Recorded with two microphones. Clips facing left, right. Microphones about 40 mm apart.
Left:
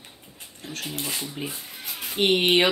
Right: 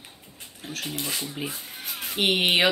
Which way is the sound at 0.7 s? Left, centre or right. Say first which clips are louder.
Even; centre.